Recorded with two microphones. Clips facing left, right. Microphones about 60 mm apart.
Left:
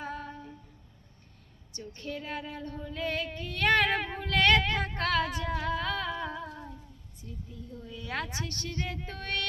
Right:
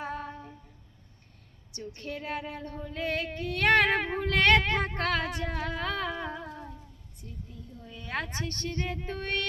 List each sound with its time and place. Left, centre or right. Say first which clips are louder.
0.0 s a sound: right 2 dB; right
1.7 s a woman's voice: right 1 dB; right
2.4 s female singing: right 1 dB; right
5.5 s music: left 2 dB; right
7.9 s female singing: right 1 dB; right
9.0 s music: right 3 dB; right